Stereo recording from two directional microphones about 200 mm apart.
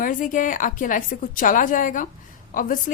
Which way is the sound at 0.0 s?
40° left (ahead or behind).